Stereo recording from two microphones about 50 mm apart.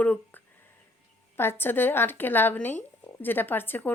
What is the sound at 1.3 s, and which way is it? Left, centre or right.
A woman's voice, left.